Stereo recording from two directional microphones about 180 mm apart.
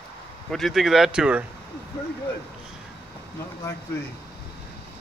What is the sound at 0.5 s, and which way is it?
Speech, centre (ahead or behind).